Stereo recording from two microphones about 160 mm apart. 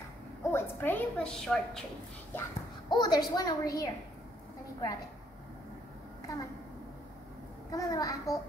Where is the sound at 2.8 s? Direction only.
25° left (ahead or behind).